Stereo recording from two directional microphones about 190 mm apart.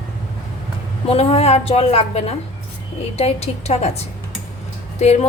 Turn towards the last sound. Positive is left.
turn(degrees=35)  # may be behind; listen again after turning